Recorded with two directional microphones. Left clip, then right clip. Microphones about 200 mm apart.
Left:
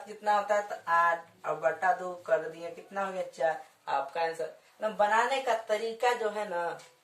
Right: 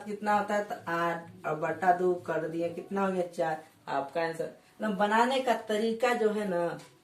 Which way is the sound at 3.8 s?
25° left (ahead or behind).